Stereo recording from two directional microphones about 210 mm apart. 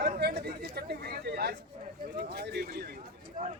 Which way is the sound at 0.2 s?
50° right (ahead or behind).